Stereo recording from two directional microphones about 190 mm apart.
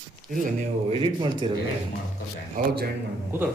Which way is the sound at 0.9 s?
25° right (ahead or behind).